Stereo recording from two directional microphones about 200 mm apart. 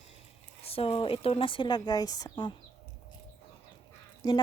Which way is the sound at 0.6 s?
30° left (ahead or behind).